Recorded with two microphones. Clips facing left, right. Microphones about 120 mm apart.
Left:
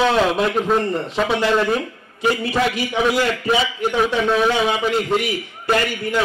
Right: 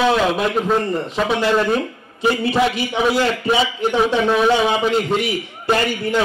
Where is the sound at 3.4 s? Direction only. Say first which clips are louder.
Right 1 dB; 15° right (ahead or behind).